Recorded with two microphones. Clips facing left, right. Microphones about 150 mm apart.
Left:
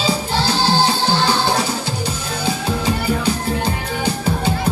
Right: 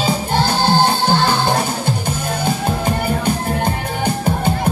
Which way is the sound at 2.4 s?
50° right (ahead or behind).